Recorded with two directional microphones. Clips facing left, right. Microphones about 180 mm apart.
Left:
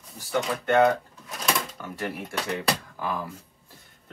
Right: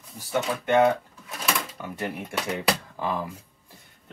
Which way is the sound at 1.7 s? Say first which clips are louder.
Right 1 dB; 15° right (ahead or behind).